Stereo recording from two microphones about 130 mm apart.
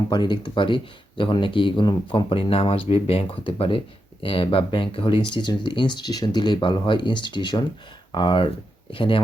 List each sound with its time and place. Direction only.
0.1 s speech: 35° left (ahead or behind)